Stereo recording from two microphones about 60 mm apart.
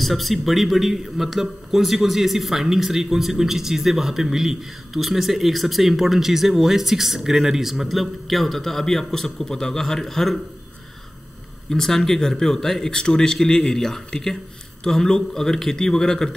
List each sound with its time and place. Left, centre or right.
0.0 s a man's voice: centre
11.7 s a man's voice: centre